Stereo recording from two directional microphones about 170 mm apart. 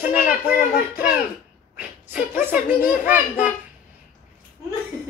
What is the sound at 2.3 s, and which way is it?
A child's voice, 10° right (ahead or behind).